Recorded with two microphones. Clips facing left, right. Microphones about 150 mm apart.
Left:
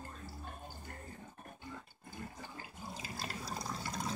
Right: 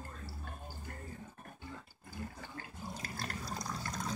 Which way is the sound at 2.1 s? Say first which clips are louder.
Right 2 dB; 15° left (ahead or behind).